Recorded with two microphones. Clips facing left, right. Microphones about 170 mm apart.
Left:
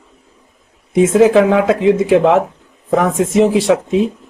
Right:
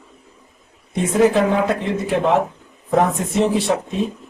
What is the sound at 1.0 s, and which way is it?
Speech, 90° left.